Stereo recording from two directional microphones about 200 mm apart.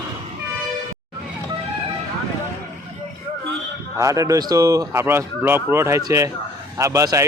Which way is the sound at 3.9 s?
15° right (ahead or behind).